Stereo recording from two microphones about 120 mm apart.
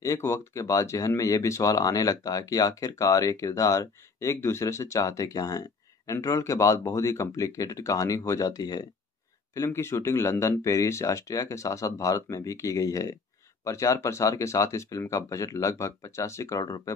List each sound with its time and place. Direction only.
0.0 s speech: 25° left (ahead or behind)
9.6 s speech: 20° left (ahead or behind)